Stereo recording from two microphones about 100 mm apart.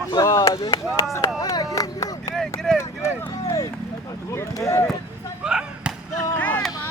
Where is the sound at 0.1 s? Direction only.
35° left (ahead or behind).